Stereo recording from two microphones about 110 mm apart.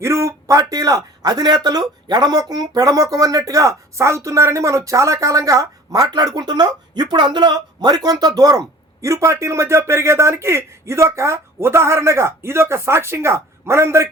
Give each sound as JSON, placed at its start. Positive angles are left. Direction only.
{"t": 0.0, "sound": "a man's voice", "side_deg": -25}